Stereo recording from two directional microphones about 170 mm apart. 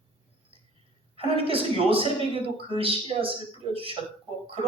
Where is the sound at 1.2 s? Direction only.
35° right (ahead or behind).